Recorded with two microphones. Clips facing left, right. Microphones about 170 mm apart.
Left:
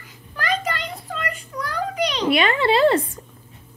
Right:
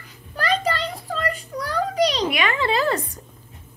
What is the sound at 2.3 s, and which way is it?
Speech, 30° left (ahead or behind).